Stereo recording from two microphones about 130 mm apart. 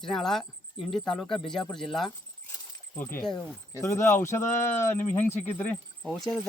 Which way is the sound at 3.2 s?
5° left (ahead or behind).